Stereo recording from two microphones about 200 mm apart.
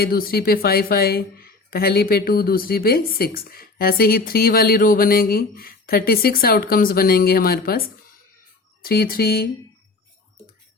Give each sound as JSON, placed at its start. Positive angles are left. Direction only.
{"t": 0.0, "sound": "speech", "side_deg": 50}